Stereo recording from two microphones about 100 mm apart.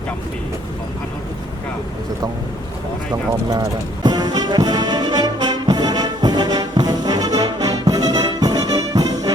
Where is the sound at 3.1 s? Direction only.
40° right (ahead or behind).